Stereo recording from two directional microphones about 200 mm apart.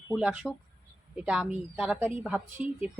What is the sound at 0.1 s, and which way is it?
A woman's voice, 5° right (ahead or behind).